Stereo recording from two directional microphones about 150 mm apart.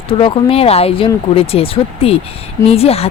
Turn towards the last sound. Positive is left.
turn(degrees=40)  # may be behind; listen again after turning